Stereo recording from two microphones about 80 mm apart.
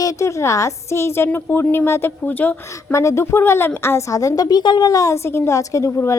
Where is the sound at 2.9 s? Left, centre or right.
Left.